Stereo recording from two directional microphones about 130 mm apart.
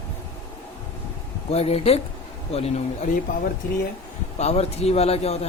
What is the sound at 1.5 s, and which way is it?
Speech, 50° left (ahead or behind).